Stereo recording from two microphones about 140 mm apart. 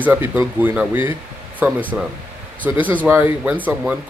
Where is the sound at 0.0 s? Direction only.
15° right (ahead or behind).